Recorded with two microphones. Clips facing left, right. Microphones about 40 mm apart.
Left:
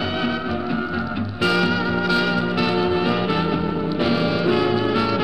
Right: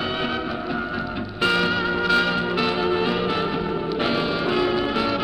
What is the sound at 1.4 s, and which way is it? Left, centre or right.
Music, right.